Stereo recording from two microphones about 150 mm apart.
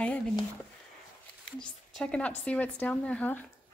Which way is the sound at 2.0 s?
5° left (ahead or behind).